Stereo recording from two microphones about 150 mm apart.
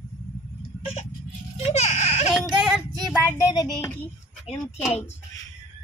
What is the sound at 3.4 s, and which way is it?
Speech, 20° left (ahead or behind).